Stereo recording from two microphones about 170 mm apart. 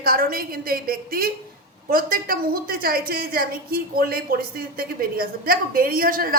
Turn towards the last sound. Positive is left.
turn(degrees=-55)  # may be behind; listen again after turning